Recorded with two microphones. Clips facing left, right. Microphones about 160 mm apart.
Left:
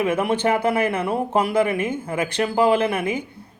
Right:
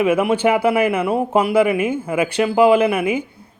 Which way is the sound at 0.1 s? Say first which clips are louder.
Right 4 dB; 10° right (ahead or behind).